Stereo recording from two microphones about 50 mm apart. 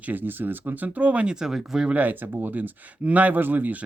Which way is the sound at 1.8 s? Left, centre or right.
Right.